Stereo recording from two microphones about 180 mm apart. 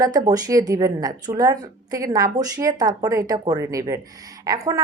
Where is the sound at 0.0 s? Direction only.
20° right (ahead or behind).